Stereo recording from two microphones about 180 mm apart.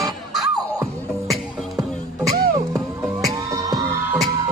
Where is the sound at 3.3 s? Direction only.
20° right (ahead or behind).